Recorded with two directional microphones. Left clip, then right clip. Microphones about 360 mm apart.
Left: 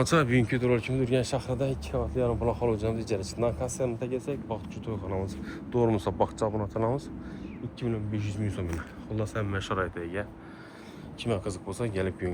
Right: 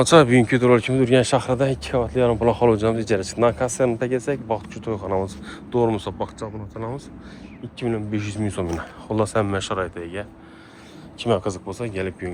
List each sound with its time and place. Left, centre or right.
0.0 s speech: centre
7.8 s speech: centre
11.2 s speech: centre